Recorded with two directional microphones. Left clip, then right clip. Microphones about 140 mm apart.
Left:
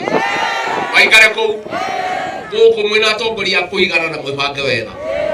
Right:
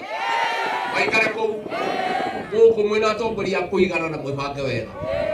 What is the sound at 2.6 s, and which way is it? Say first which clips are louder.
A man's voice: left 5 dB; 25° left (ahead or behind).